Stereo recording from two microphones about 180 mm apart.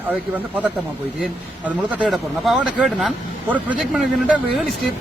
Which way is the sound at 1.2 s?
5° right (ahead or behind).